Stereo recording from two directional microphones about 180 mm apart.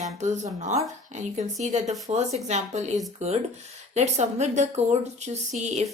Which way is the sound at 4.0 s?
40° right (ahead or behind).